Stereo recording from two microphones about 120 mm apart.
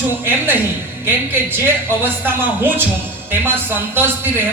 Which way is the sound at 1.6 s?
20° right (ahead or behind).